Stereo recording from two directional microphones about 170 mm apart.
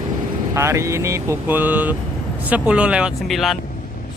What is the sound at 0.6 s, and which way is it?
Speech, 15° right (ahead or behind).